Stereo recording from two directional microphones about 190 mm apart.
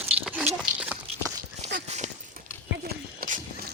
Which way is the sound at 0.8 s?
10° right (ahead or behind).